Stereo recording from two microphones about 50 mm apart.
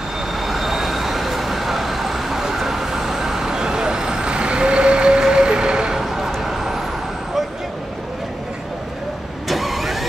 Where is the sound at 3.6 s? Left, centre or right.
Centre.